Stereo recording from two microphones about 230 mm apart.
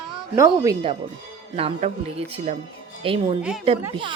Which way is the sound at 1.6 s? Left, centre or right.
Right.